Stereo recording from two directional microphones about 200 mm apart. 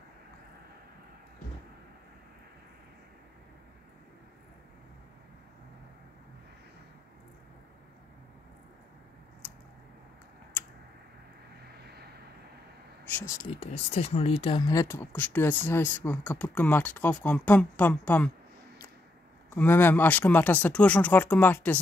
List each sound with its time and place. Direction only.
13.4 s speech: 30° left (ahead or behind); by 18.3 s 10° left (ahead or behind)
19.5 s speech: 10° left (ahead or behind)